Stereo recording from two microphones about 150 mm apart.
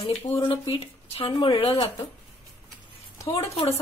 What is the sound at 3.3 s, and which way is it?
Speech, 40° left (ahead or behind).